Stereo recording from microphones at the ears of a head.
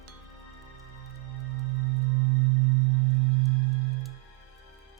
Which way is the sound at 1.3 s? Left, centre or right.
Right.